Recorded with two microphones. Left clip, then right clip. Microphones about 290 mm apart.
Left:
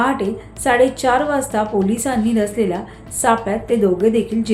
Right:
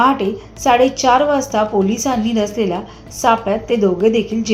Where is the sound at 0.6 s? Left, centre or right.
Centre.